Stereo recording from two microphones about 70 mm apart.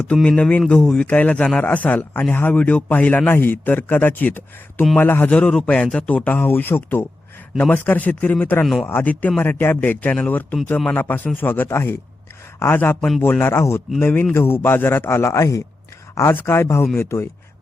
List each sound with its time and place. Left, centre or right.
0.1 s speech: centre
5.3 s speech: centre
8.6 s speech: centre
8.9 s a man's voice: left
16.3 s a man's voice: left